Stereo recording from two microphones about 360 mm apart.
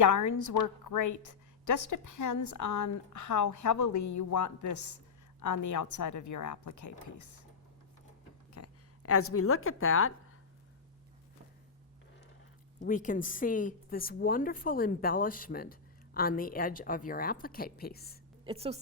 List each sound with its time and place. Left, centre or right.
0.0 s a woman's voice: left
8.5 s speech: left
12.8 s a woman's voice: left
18.4 s a woman's voice: centre